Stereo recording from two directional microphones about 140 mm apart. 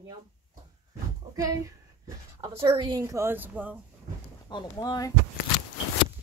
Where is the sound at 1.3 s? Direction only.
20° right (ahead or behind).